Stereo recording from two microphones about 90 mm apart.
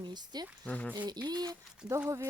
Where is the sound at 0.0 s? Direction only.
55° right (ahead or behind).